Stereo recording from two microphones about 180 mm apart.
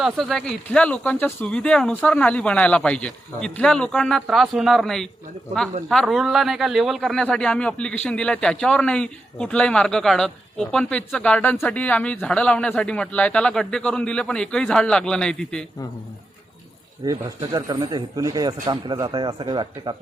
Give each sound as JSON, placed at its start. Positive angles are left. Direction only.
{"t": 0.0, "sound": "a man's voice", "side_deg": 0}
{"t": 17.0, "sound": "speech", "side_deg": -20}